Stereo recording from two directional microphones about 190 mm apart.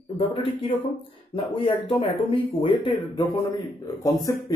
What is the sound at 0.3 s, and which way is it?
Speech, 30° left (ahead or behind).